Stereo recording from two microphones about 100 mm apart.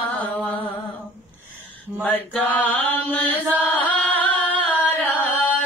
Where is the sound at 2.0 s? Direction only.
15° left (ahead or behind).